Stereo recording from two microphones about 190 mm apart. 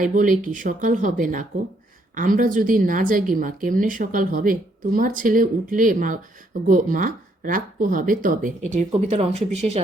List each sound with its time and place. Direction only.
0.0 s speech: 45° right (ahead or behind)